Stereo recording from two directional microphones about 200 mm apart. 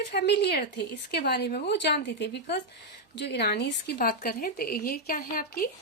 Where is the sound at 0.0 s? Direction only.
55° left (ahead or behind).